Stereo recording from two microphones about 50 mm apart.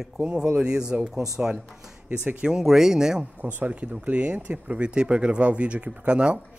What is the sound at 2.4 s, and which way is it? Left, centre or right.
Speech, centre.